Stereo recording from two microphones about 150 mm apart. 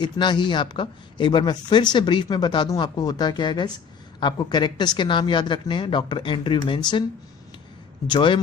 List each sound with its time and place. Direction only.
0.0 s speech: 30° left (ahead or behind)
8.0 s speech: 30° left (ahead or behind)